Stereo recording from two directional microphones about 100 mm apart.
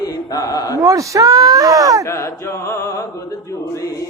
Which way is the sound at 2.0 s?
30° left (ahead or behind).